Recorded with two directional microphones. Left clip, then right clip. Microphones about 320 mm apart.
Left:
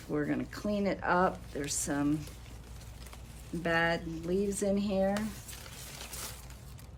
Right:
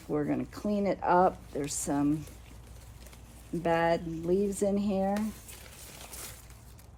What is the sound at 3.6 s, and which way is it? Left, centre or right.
Speech, centre.